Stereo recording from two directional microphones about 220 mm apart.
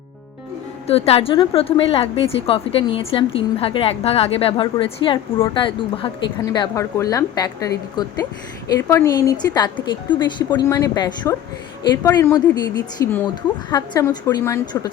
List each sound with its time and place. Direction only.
0.9 s a woman's voice: 25° left (ahead or behind)